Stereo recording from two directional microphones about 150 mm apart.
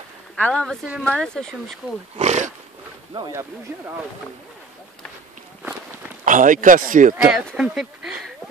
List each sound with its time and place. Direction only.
0.4 s speech: 5° left (ahead or behind)
2.1 s wild animals: 50° right (ahead or behind)
3.1 s speech: 25° right (ahead or behind)
6.2 s a man's voice: 60° right (ahead or behind)
7.2 s speech: centre (ahead or behind)